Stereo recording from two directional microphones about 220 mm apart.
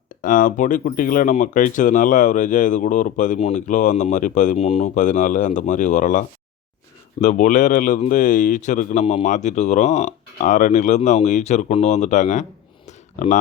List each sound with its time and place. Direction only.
0.2 s speech: 35° left (ahead or behind)